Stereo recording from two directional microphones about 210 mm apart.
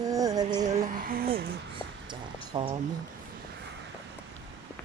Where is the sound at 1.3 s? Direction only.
25° right (ahead or behind).